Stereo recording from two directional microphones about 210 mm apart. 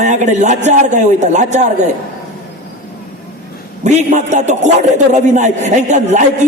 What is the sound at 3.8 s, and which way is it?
A man's voice, 35° right (ahead or behind).